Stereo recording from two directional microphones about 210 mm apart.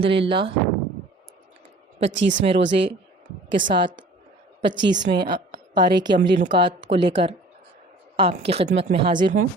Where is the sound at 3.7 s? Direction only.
20° right (ahead or behind).